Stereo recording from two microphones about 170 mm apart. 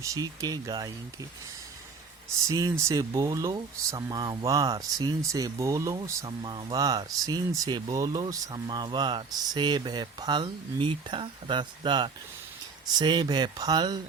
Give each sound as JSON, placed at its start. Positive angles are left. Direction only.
{"t": 0.0, "sound": "speech", "side_deg": -20}
{"t": 2.4, "sound": "speech", "side_deg": -20}